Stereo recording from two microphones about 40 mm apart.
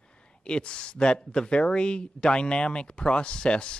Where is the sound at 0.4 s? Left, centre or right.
Left.